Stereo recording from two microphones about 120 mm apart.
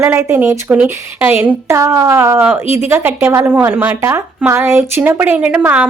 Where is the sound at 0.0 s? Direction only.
20° right (ahead or behind).